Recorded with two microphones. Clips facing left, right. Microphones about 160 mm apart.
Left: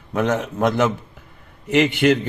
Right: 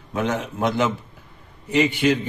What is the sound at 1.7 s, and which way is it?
Speech, 70° left (ahead or behind).